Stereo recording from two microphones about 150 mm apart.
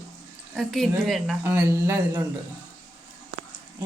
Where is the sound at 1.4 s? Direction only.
15° right (ahead or behind).